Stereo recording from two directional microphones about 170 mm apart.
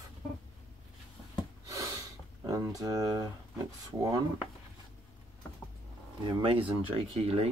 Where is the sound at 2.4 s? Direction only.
20° right (ahead or behind).